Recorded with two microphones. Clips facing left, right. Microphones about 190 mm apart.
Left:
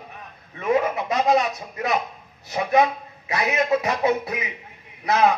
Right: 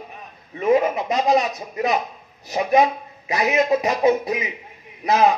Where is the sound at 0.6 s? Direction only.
20° right (ahead or behind).